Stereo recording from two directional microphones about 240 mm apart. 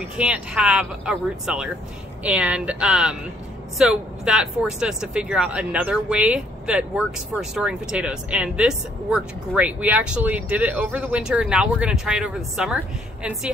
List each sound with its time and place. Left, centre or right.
0.2 s speech: centre